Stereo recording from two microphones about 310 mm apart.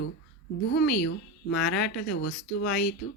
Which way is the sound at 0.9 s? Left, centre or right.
Left.